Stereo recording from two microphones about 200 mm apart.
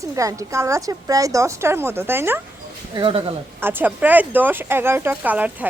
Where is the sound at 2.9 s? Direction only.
25° right (ahead or behind).